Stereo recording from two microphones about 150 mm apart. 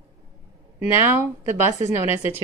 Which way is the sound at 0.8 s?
15° right (ahead or behind).